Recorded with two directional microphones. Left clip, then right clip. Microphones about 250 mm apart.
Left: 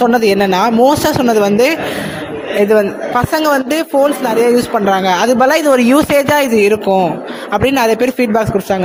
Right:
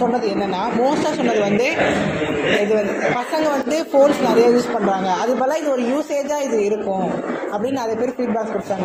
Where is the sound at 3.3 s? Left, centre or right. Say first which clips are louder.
Left 6 dB; left.